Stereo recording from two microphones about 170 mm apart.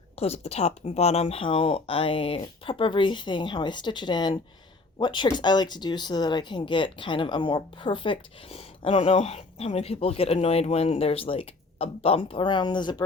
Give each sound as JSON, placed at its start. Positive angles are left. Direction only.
{"t": 0.2, "sound": "speech", "side_deg": 35}